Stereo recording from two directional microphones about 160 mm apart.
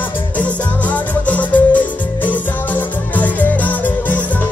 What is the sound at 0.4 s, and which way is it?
Music, 10° left (ahead or behind).